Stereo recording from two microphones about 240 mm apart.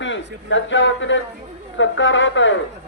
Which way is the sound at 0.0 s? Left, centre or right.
Left.